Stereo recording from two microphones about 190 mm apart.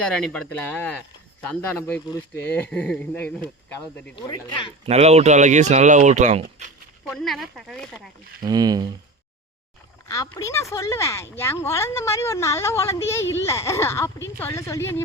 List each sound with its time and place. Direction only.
0.0 s speech: 5° left (ahead or behind)
4.1 s speech: 25° left (ahead or behind)
4.9 s speech: 35° right (ahead or behind)
7.0 s speech: centre (ahead or behind)
8.4 s speech: 20° right (ahead or behind)
10.1 s speech: 15° left (ahead or behind)